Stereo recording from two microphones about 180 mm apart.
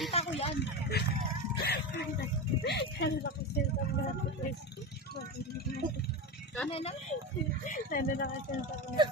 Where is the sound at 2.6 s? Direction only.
70° left (ahead or behind).